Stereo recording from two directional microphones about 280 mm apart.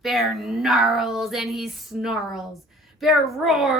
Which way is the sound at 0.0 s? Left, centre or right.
Centre.